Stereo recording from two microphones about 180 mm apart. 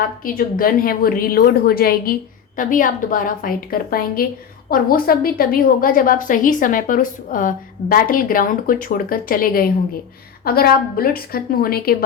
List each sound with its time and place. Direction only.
0.3 s a woman's voice: 50° left (ahead or behind)